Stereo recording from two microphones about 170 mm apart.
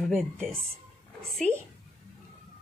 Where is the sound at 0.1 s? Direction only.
Centre (ahead or behind).